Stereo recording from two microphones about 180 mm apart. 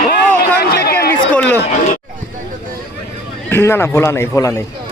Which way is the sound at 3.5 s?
15° left (ahead or behind).